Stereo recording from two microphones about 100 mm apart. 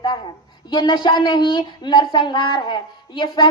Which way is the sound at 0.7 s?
50° left (ahead or behind).